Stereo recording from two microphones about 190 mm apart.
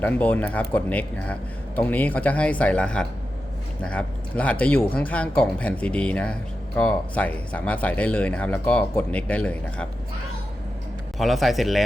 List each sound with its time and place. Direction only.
0.0 s speech: 10° left (ahead or behind)
11.2 s speech: centre (ahead or behind)